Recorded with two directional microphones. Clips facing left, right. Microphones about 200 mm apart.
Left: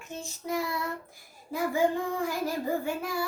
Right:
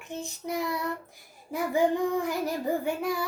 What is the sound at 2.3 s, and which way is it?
Child singing, 20° right (ahead or behind).